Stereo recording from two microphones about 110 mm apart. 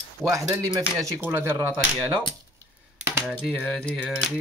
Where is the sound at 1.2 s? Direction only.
20° right (ahead or behind).